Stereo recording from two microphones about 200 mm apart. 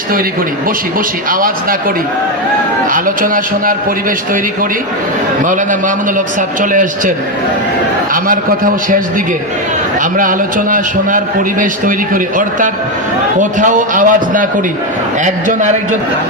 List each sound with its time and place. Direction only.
2.9 s a man's voice: 45° right (ahead or behind)
6.1 s a man's voice: 40° right (ahead or behind)
8.1 s a man's voice: 45° right (ahead or behind)
10.0 s a man's voice: 45° right (ahead or behind)